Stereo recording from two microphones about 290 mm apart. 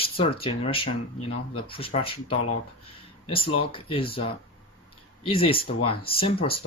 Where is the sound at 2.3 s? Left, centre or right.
Left.